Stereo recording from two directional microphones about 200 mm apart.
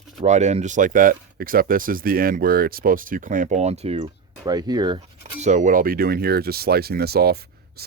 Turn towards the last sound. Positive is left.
turn(degrees=-50)  # may be behind; listen again after turning